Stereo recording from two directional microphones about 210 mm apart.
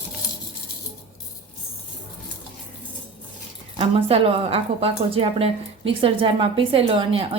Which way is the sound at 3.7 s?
25° right (ahead or behind).